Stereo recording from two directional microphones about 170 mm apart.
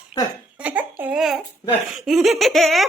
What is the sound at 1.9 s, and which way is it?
Laughter, centre (ahead or behind).